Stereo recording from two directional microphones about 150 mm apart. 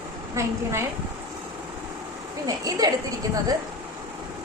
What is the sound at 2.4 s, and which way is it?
Speech, 25° right (ahead or behind).